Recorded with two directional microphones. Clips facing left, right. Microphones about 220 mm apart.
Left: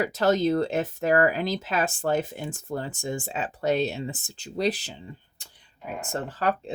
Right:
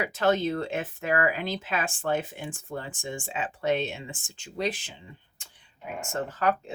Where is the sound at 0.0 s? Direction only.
40° left (ahead or behind).